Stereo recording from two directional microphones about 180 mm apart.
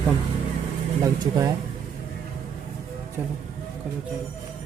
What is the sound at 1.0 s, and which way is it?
Speech, 20° right (ahead or behind).